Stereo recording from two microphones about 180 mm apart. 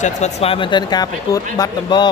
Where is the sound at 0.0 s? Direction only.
40° left (ahead or behind).